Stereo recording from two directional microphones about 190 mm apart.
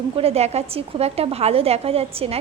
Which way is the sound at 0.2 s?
30° right (ahead or behind).